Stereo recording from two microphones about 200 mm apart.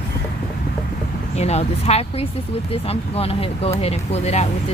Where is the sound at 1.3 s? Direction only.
30° left (ahead or behind).